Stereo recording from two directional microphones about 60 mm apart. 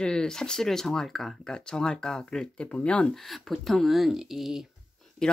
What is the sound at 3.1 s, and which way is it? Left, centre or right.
Speech, centre.